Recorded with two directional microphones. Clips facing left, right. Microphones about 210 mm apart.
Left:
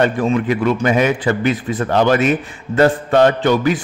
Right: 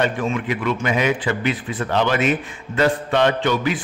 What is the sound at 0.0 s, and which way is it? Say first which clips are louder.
A man's voice: left 6 dB; 40° left (ahead or behind).